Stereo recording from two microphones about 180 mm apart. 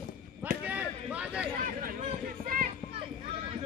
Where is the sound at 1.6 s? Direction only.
50° right (ahead or behind).